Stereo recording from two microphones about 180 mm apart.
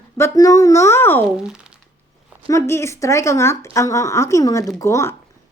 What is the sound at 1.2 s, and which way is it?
Speech, 5° right (ahead or behind).